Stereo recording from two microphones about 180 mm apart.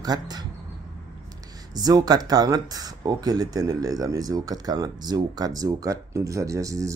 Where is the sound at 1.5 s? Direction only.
20° right (ahead or behind).